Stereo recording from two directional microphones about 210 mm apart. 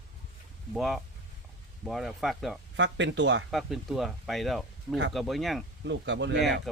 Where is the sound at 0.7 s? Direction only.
Centre (ahead or behind).